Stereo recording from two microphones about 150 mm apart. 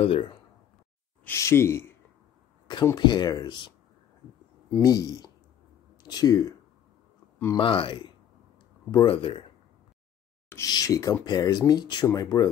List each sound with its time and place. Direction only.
0.0 s speech: 35° left (ahead or behind)
1.2 s speech: 15° left (ahead or behind)
2.7 s speech: 30° left (ahead or behind)
4.7 s speech: 25° left (ahead or behind)
7.5 s speech: 35° left (ahead or behind)
10.5 s speech: 25° left (ahead or behind)